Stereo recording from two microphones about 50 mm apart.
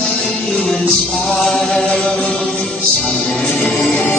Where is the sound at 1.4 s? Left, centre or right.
Centre.